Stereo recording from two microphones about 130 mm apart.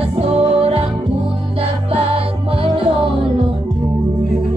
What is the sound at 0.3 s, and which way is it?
Music, 50° right (ahead or behind).